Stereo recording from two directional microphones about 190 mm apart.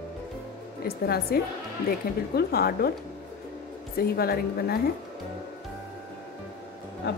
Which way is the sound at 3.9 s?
55° left (ahead or behind).